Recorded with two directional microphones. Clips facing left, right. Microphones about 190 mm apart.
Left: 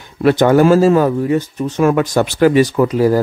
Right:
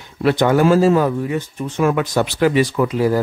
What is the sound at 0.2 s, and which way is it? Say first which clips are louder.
Speech: left 4 dB; 45° left (ahead or behind).